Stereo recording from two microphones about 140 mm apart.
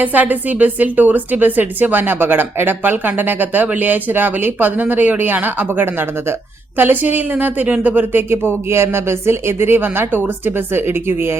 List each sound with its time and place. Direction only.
0.0 s a woman's voice: 10° right (ahead or behind)